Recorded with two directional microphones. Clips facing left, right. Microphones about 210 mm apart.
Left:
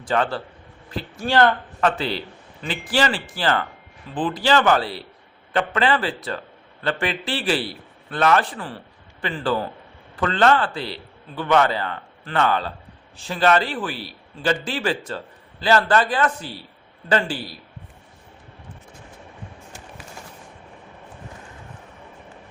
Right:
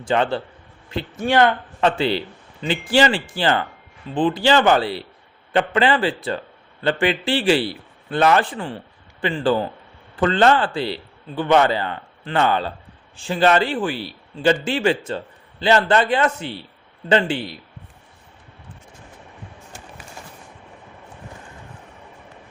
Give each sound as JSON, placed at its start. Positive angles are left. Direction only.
{"t": 0.0, "sound": "speech", "side_deg": -25}
{"t": 13.9, "sound": "a man's voice", "side_deg": 0}
{"t": 14.4, "sound": "speech", "side_deg": -25}